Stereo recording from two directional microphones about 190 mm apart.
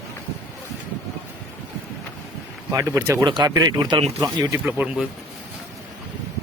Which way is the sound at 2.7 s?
15° right (ahead or behind).